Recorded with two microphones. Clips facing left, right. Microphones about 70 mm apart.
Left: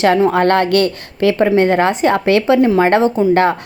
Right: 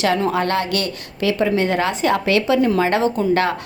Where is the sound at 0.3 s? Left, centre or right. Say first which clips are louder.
Left 7 dB; left.